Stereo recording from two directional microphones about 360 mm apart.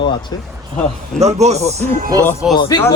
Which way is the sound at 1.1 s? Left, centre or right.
Centre.